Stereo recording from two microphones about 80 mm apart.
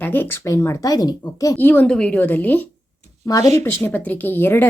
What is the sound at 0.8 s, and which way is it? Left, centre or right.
Speech, left.